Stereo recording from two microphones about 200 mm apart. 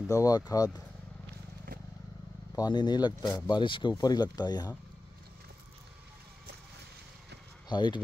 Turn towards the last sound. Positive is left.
turn(degrees=20)  # may be behind; listen again after turning